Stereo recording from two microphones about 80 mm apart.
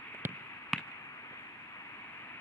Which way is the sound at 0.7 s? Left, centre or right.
Centre.